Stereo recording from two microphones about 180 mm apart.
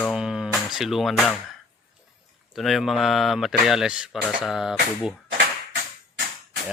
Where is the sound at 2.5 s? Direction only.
Centre (ahead or behind).